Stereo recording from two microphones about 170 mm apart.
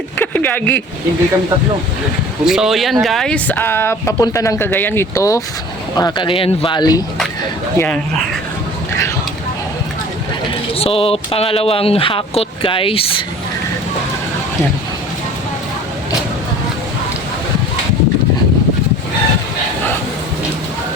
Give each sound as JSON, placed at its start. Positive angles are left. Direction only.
{"t": 0.2, "sound": "speech", "side_deg": 10}
{"t": 2.4, "sound": "speech", "side_deg": -5}
{"t": 7.8, "sound": "speech", "side_deg": 5}
{"t": 10.8, "sound": "speech", "side_deg": 35}